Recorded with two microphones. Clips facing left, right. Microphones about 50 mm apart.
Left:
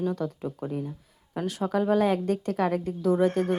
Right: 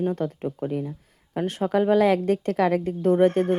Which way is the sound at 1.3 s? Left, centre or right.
Right.